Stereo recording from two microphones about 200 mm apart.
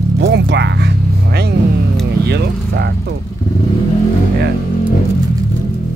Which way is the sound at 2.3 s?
55° right (ahead or behind).